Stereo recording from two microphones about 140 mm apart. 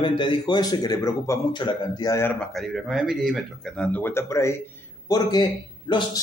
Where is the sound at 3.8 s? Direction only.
15° left (ahead or behind); by 6.2 s 30° left (ahead or behind).